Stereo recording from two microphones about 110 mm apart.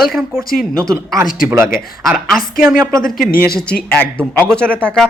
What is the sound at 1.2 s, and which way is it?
Speech, 20° right (ahead or behind).